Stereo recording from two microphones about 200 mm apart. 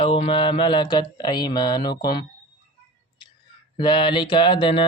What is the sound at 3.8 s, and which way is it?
Speech, 25° left (ahead or behind).